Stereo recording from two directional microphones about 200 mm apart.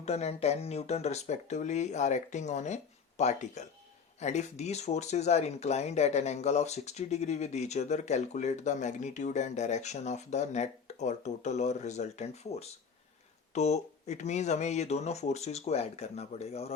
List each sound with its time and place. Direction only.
0.0 s speech: 30° left (ahead or behind)